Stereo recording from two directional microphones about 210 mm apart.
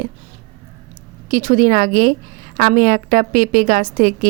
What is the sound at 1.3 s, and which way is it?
Speech, 40° right (ahead or behind).